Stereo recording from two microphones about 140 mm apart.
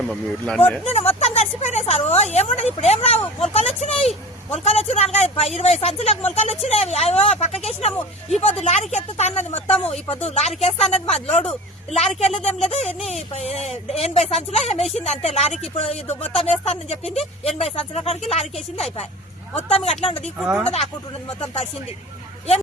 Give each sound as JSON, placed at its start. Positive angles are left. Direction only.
{"t": 0.4, "sound": "speech", "side_deg": 10}
{"t": 0.9, "sound": "speech", "side_deg": 50}
{"t": 19.5, "sound": "speech", "side_deg": 45}
{"t": 20.4, "sound": "speech", "side_deg": -5}